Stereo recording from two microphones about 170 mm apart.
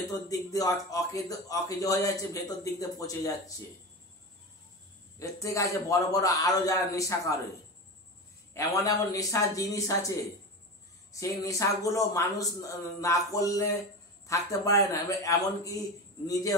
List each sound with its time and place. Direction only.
0.1 s a man's voice: 20° left (ahead or behind)
5.2 s a man's voice: 20° left (ahead or behind)
8.5 s a man's voice: 20° left (ahead or behind)
11.4 s a man's voice: 20° left (ahead or behind)